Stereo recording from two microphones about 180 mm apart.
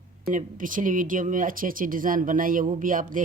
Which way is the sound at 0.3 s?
45° right (ahead or behind).